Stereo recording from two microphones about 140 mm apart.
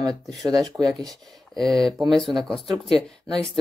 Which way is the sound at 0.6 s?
5° left (ahead or behind).